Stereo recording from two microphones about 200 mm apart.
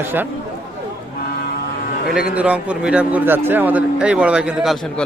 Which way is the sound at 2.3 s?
5° right (ahead or behind).